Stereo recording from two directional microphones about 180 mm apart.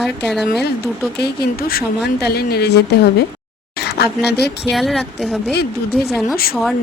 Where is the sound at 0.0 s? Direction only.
Centre (ahead or behind).